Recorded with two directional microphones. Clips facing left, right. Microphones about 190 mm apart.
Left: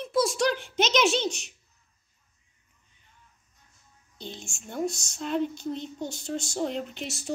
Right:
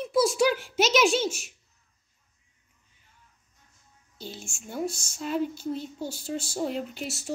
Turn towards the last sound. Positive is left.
turn(degrees=-5)  # may be behind; listen again after turning